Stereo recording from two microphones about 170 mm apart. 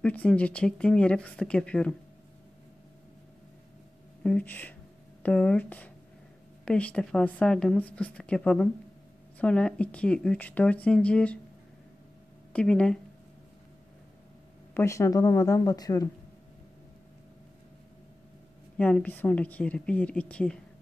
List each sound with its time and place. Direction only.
0.0 s speech: 10° left (ahead or behind)
4.2 s speech: 10° left (ahead or behind)
12.5 s speech: 5° left (ahead or behind)
14.7 s speech: 15° left (ahead or behind)
18.8 s speech: 5° left (ahead or behind)